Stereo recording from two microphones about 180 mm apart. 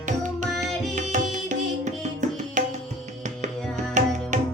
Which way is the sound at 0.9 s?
40° right (ahead or behind).